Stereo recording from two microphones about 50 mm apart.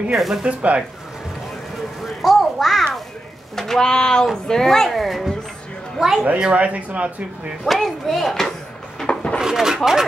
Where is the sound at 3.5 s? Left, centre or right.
Centre.